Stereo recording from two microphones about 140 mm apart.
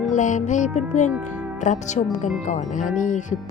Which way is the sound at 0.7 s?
60° left (ahead or behind).